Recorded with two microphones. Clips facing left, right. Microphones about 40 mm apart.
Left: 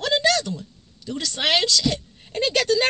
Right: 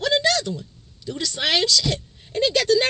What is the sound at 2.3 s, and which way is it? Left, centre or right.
Speech, left.